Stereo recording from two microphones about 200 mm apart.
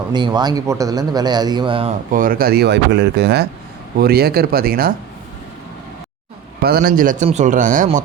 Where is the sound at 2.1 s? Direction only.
45° right (ahead or behind).